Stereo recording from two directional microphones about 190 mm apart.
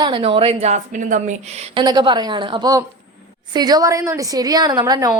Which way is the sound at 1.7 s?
20° right (ahead or behind).